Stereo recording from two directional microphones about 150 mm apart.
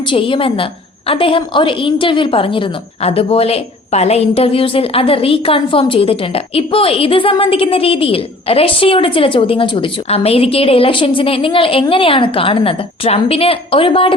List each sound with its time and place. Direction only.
0.1 s a woman's voice: 35° left (ahead or behind)